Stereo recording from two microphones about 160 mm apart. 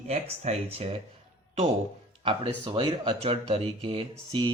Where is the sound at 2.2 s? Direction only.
35° right (ahead or behind).